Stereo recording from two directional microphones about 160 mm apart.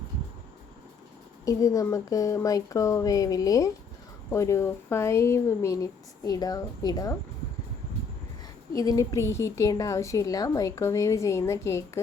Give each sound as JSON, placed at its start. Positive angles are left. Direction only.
{"t": 1.5, "sound": "a woman's voice", "side_deg": 20}
{"t": 8.7, "sound": "a woman's voice", "side_deg": 20}